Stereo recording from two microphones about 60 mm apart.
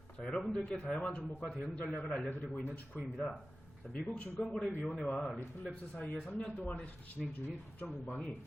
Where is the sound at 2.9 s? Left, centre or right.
Centre.